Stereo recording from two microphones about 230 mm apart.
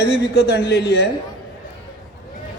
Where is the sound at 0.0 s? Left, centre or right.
Left.